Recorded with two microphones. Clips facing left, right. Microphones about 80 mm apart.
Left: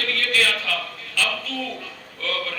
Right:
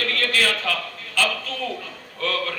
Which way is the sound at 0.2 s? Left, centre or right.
Right.